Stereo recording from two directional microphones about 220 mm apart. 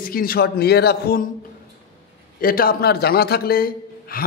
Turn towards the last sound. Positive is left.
turn(degrees=40)  # may be behind; listen again after turning